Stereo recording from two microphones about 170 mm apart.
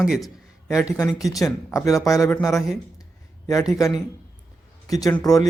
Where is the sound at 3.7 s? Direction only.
20° left (ahead or behind).